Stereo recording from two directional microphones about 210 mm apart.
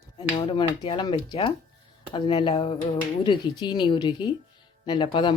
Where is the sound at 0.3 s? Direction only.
25° left (ahead or behind).